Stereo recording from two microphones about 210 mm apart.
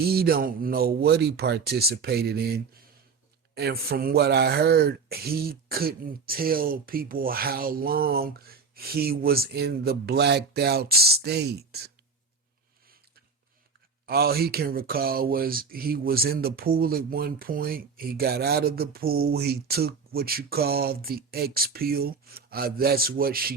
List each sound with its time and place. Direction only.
0.0 s speech: 45° right (ahead or behind)
14.1 s speech: 45° right (ahead or behind)